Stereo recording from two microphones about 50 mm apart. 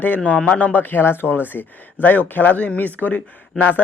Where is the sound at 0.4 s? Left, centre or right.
Left.